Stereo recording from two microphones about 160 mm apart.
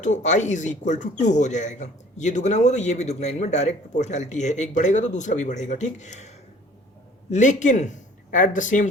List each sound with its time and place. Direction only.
0.0 s speech: 50° left (ahead or behind)